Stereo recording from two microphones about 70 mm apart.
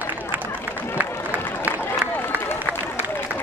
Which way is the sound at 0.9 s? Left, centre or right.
Right.